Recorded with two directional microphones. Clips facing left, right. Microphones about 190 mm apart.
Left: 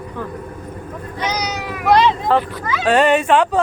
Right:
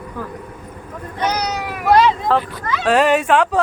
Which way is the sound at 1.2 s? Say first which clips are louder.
Right 2 dB; 60° right (ahead or behind).